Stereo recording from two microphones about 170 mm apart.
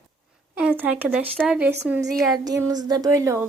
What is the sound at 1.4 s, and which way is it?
Speech, 5° right (ahead or behind).